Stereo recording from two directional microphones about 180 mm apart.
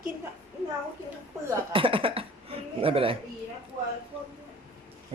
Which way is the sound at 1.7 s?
30° right (ahead or behind).